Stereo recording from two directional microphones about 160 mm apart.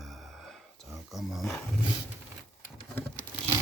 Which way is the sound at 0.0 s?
Centre (ahead or behind).